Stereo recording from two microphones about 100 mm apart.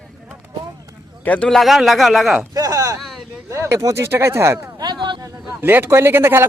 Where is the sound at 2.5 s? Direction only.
35° right (ahead or behind).